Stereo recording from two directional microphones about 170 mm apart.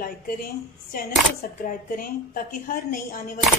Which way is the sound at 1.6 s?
55° left (ahead or behind).